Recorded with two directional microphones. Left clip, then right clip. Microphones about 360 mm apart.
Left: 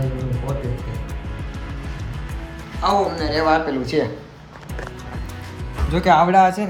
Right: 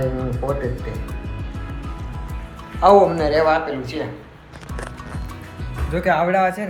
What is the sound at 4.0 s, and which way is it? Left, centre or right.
Speech, left.